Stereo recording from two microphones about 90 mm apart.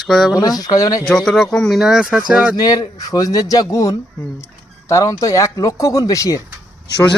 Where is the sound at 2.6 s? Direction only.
45° left (ahead or behind).